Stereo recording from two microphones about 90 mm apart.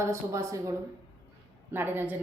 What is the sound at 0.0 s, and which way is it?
Speech, 35° right (ahead or behind).